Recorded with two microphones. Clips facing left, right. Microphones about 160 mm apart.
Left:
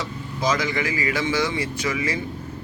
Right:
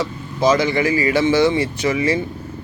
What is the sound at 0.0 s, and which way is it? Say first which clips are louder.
Speech: right 7 dB; 30° right (ahead or behind).